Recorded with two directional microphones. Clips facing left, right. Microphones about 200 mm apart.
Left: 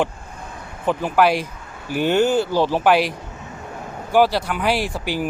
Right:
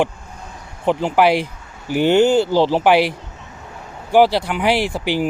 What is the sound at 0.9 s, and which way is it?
Speech, 15° right (ahead or behind).